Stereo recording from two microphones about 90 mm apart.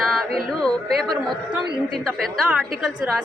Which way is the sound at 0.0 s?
5° left (ahead or behind).